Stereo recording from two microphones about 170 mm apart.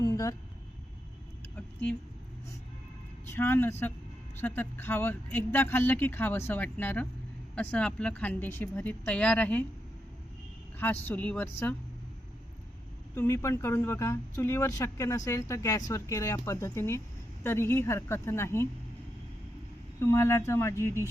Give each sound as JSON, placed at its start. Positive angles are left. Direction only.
{"t": 0.0, "sound": "a sound", "side_deg": 20}
{"t": 1.5, "sound": "speech", "side_deg": 10}
{"t": 3.2, "sound": "speech", "side_deg": 15}
{"t": 10.8, "sound": "speech", "side_deg": 10}
{"t": 13.1, "sound": "speech", "side_deg": 15}
{"t": 20.0, "sound": "speech", "side_deg": 15}